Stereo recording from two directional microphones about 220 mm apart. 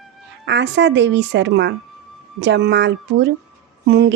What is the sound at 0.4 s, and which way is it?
A woman's voice, 55° right (ahead or behind).